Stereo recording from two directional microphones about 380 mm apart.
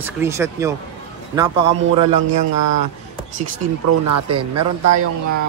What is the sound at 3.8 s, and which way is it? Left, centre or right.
Speech, right.